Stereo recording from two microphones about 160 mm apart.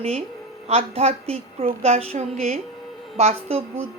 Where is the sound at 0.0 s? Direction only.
40° right (ahead or behind).